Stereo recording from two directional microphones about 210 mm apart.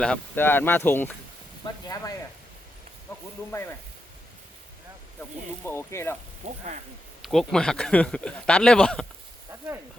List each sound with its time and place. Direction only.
0.0 s speech: 5° left (ahead or behind)
5.6 s speech: 10° left (ahead or behind)
6.4 s sizzle: 35° right (ahead or behind)
7.2 s speech: centre (ahead or behind)